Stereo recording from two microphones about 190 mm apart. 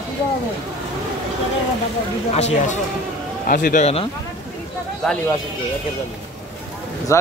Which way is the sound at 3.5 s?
45° left (ahead or behind).